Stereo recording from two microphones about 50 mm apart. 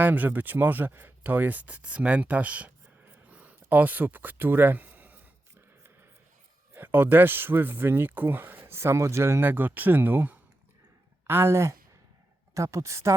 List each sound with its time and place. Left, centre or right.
0.0 s speech: right
3.2 s a sound: right
6.7 s speech: right
8.7 s speech: right
9.4 s speech: right
11.3 s a woman's voice: right